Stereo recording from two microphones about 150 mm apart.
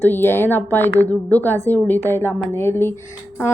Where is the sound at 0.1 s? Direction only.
15° left (ahead or behind).